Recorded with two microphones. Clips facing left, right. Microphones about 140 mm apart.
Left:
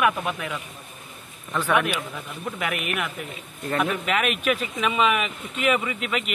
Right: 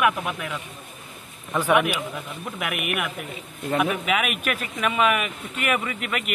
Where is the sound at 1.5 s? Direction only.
15° right (ahead or behind).